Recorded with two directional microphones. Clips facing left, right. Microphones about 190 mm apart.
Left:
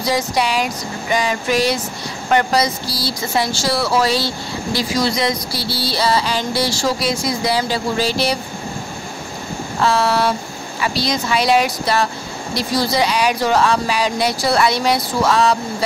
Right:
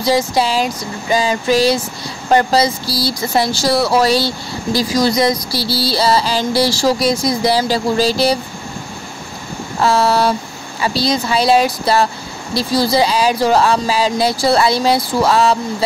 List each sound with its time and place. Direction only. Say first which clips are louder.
0.0 s speech: right 4 dB; 30° right (ahead or behind)
1.1 s music: right 4 dB; 30° right (ahead or behind)
9.8 s music: right 3 dB; 35° right (ahead or behind)